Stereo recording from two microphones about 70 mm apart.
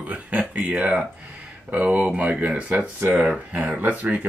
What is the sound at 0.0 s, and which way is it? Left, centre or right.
Speech, centre.